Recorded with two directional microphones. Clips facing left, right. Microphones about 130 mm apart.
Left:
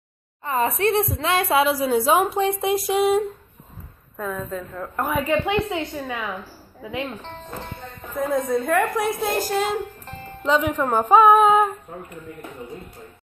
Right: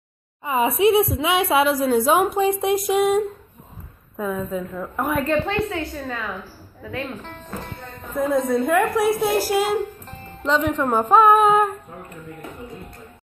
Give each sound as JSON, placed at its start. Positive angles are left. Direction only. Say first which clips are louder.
{"t": 0.4, "sound": "a woman's voice", "louder": "right 3 dB", "side_deg": -10}
{"t": 8.1, "sound": "a woman's voice", "louder": "right 2 dB", "side_deg": 0}